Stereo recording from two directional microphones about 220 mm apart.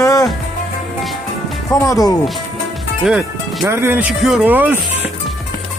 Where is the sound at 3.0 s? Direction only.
5° right (ahead or behind).